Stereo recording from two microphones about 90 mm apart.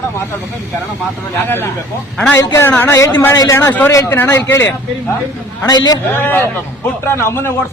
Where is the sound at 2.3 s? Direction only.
30° left (ahead or behind).